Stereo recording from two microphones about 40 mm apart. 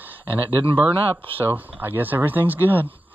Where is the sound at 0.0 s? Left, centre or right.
Right.